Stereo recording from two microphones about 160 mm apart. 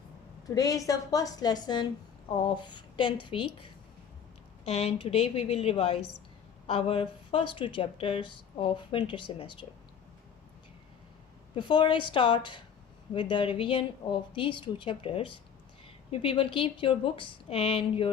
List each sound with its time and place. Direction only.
0.4 s a woman's voice: 20° left (ahead or behind)
11.5 s speech: 30° left (ahead or behind)